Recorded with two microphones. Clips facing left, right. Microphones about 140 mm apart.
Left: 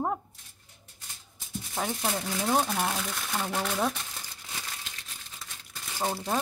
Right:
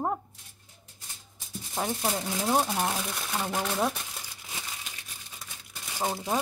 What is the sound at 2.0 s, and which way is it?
Speech, 5° right (ahead or behind).